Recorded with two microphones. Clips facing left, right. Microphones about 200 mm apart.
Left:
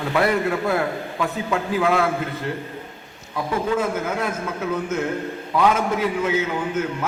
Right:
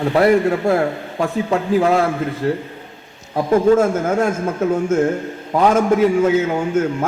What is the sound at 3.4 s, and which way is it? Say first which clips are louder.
A man's voice: right 9 dB; 45° right (ahead or behind).